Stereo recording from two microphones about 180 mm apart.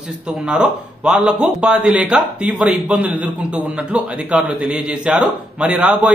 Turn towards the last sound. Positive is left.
turn(degrees=-5)  # may be behind; listen again after turning